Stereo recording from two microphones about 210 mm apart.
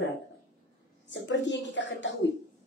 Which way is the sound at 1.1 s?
60° left (ahead or behind).